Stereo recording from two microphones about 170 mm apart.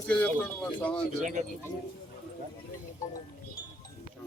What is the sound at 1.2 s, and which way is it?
Speech, 45° right (ahead or behind).